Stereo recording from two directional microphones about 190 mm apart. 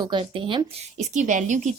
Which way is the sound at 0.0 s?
25° right (ahead or behind).